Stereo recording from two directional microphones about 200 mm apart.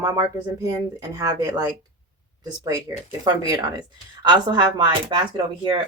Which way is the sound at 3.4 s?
20° right (ahead or behind).